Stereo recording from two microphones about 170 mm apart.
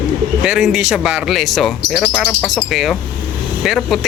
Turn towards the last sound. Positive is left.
turn(degrees=0)  # may be behind; listen again after turning